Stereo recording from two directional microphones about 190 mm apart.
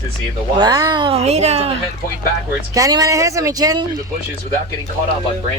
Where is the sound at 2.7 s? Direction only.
20° right (ahead or behind).